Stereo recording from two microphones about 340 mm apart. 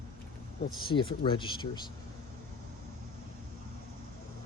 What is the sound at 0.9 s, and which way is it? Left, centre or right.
Speech, left.